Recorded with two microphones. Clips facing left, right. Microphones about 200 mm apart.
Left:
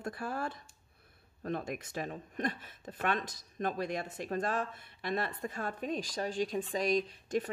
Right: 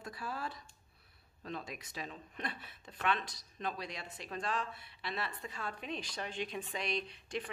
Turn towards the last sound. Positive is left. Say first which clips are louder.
# left 7 dB
turn(degrees=40)  # may be behind; listen again after turning